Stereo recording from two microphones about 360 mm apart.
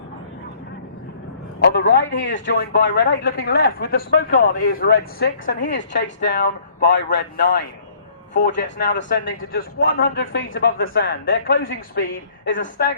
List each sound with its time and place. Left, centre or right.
1.6 s a man's voice: left